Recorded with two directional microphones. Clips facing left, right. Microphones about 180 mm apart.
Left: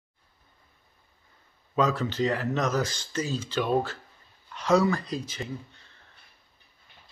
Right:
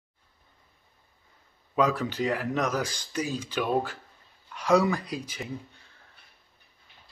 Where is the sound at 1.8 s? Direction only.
10° right (ahead or behind).